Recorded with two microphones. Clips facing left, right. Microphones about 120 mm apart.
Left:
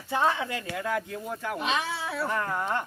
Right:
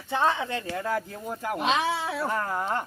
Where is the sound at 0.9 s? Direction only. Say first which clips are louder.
Left 2 dB; centre (ahead or behind).